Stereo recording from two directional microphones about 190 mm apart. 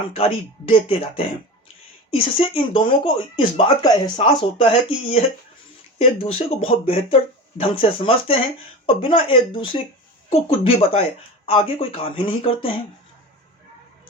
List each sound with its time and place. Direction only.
0.1 s speech: 30° left (ahead or behind)